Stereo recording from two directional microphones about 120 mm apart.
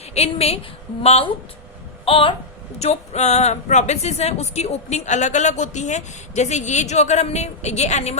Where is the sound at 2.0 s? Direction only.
50° left (ahead or behind).